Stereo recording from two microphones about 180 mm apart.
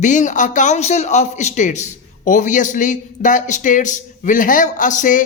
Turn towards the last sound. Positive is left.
turn(degrees=45)  # may be behind; listen again after turning